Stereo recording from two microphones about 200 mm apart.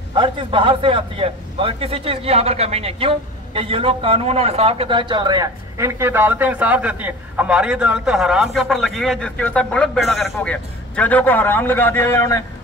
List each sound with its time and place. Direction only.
0.1 s a man's voice: 25° right (ahead or behind); by 12.4 s 15° left (ahead or behind)